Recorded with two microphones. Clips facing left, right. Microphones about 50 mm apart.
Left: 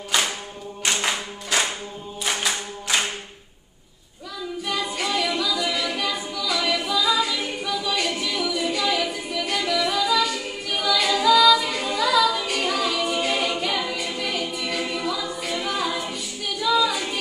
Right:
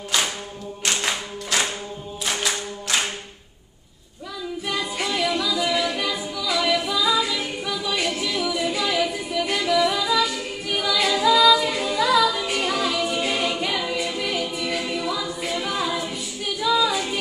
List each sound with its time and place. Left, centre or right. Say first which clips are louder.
0.8 s clapping: left 1 dB; centre
2.2 s singing: even; centre
4.6 s a capella: even; centre